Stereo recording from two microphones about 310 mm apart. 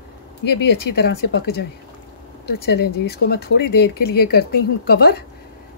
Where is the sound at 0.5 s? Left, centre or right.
Left.